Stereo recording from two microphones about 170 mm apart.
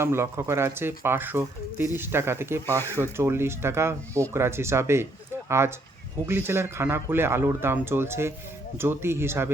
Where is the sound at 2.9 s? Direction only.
15° right (ahead or behind).